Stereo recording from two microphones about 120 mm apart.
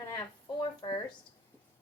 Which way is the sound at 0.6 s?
40° left (ahead or behind).